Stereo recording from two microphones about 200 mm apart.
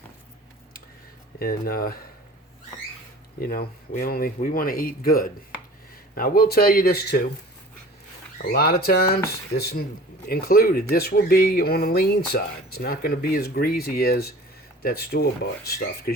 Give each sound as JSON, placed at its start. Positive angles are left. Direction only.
{"t": 1.4, "sound": "speech", "side_deg": 50}
{"t": 3.4, "sound": "speech", "side_deg": 50}
{"t": 8.5, "sound": "speech", "side_deg": 50}